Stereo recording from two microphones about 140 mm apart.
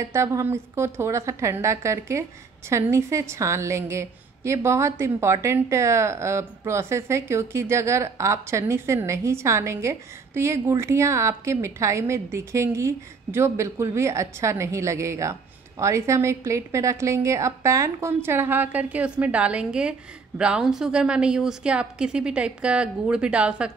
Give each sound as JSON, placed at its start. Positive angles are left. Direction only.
{"t": 0.0, "sound": "a woman's voice", "side_deg": -20}